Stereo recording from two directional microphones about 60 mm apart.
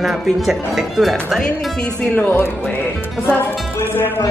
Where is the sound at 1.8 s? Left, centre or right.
Left.